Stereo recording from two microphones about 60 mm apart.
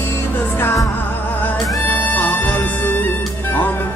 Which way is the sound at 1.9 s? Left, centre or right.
Left.